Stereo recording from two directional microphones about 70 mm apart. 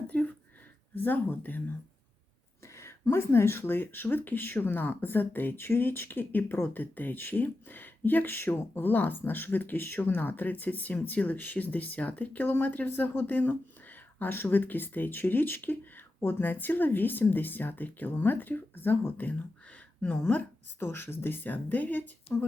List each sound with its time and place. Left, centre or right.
0.1 s a sound: left
0.9 s speech: left
2.7 s a woman's voice: left
20.8 s speech: left